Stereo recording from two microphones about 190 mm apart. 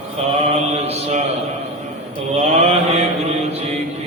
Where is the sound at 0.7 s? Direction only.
35° right (ahead or behind).